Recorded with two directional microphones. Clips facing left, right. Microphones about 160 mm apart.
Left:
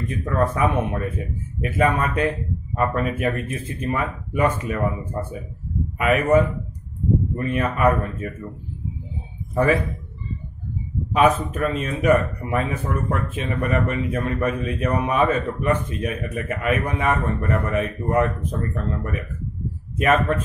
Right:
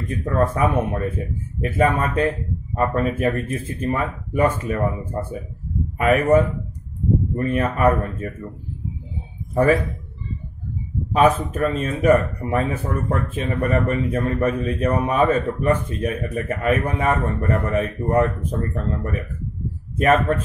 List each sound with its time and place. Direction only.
0.1 s speech: 30° right (ahead or behind)
0.4 s speech: 40° right (ahead or behind)
9.5 s a man's voice: 30° right (ahead or behind)
11.1 s speech: 30° right (ahead or behind)
20.0 s speech: 30° right (ahead or behind)